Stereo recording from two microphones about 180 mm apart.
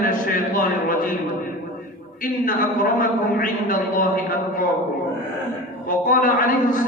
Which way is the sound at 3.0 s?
50° left (ahead or behind).